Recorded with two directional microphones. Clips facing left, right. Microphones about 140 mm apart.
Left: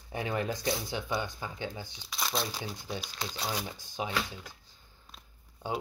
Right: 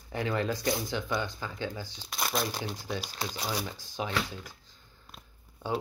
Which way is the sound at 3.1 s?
10° right (ahead or behind).